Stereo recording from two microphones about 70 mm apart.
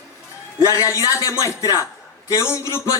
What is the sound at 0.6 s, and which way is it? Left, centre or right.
A man's voice, left.